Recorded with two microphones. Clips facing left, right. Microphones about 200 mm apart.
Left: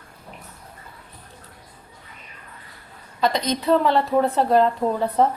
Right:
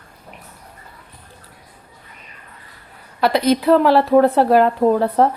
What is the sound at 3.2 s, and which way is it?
A woman's voice, 70° right (ahead or behind).